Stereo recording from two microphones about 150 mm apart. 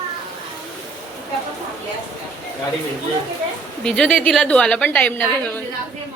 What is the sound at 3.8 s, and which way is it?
A woman's voice, 5° left (ahead or behind).